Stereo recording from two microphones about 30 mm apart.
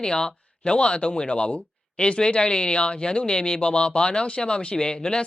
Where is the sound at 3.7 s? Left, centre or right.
Left.